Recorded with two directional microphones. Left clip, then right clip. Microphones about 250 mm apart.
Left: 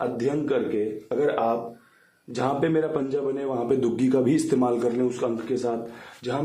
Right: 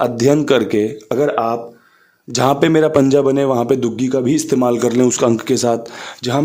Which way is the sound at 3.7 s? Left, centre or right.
Right.